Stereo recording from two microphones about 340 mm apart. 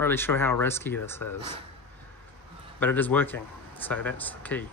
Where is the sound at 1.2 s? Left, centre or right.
Left.